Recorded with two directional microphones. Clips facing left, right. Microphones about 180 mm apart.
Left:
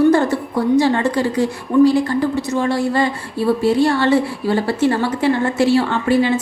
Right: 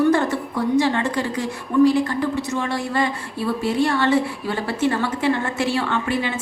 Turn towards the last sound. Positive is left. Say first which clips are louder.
# left 7 dB
turn(degrees=35)  # may be behind; listen again after turning